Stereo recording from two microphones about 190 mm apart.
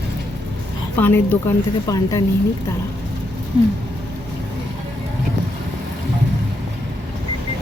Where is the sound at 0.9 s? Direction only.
10° left (ahead or behind).